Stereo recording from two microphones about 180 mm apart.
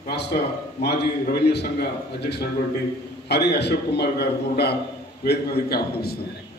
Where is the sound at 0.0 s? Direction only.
65° left (ahead or behind).